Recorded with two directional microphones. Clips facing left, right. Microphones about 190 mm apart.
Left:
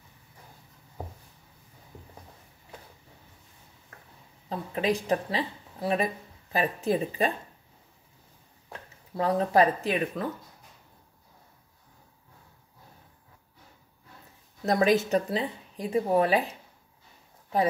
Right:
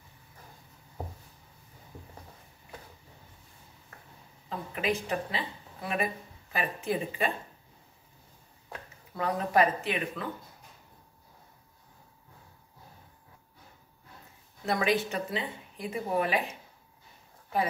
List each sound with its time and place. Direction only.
4.5 s speech: 35° left (ahead or behind)
9.1 s speech: 30° left (ahead or behind)
14.7 s speech: 40° left (ahead or behind)